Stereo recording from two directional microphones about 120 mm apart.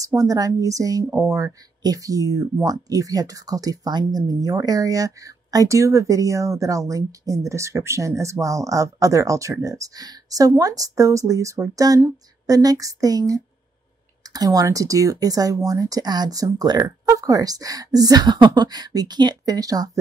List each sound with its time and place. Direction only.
0.0 s speech: 30° right (ahead or behind)